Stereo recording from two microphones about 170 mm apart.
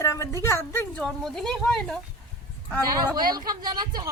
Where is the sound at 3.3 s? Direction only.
25° right (ahead or behind).